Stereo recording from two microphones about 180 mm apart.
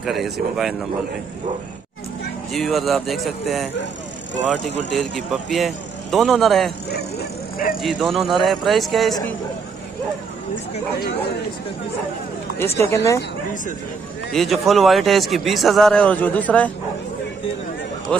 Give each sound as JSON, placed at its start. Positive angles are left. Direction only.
{"t": 0.0, "sound": "a man's voice", "side_deg": 0}
{"t": 2.5, "sound": "a man's voice", "side_deg": 0}
{"t": 4.9, "sound": "a man's voice", "side_deg": 0}
{"t": 6.9, "sound": "a sound", "side_deg": 65}
{"t": 7.8, "sound": "a man's voice", "side_deg": 0}
{"t": 10.5, "sound": "speech", "side_deg": 65}
{"t": 12.5, "sound": "speech", "side_deg": 15}
{"t": 14.3, "sound": "a man's voice", "side_deg": 0}